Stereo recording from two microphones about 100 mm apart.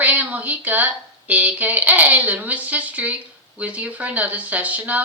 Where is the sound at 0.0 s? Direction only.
15° right (ahead or behind).